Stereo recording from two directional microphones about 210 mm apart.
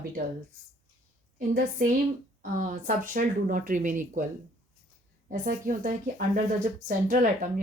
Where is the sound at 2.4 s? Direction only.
40° right (ahead or behind).